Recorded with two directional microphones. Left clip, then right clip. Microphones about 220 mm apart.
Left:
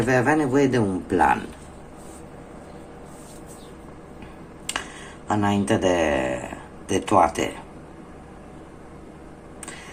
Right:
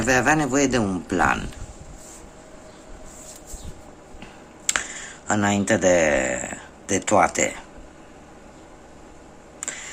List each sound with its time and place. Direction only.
0.1 s a man's voice: 35° right (ahead or behind)
5.3 s speech: 35° right (ahead or behind)